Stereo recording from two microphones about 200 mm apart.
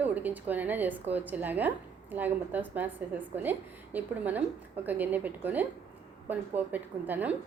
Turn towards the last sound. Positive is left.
turn(degrees=-10)  # may be behind; listen again after turning